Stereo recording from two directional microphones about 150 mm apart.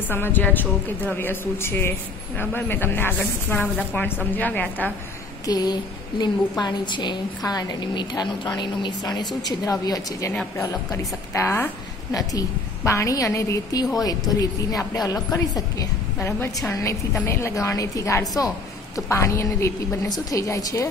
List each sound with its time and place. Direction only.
0.1 s a woman's voice: 15° left (ahead or behind)
5.5 s a woman's voice: 25° left (ahead or behind)